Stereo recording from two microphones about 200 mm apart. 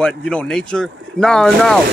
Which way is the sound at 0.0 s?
5° left (ahead or behind).